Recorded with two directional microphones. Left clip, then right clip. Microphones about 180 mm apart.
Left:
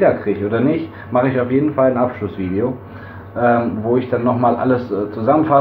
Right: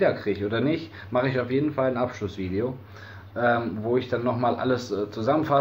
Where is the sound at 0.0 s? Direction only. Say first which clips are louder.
Left 8 dB; 20° right (ahead or behind).